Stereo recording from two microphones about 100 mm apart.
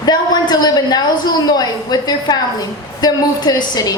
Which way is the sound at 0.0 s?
45° left (ahead or behind).